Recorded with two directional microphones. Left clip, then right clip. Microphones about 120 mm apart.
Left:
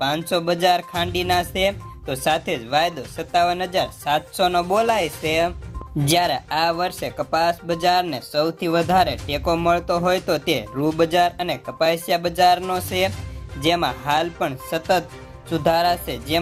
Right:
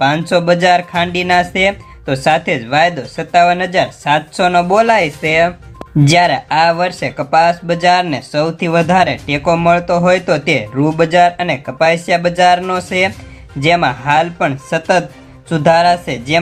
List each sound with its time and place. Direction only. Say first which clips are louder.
0.0 s speech: right 9 dB; 35° left (ahead or behind)